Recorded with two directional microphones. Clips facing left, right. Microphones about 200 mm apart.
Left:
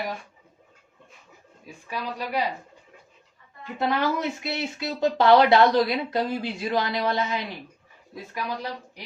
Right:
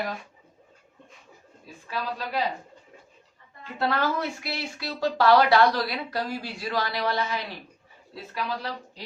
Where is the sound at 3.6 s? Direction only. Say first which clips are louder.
Left 1 dB; 15° left (ahead or behind).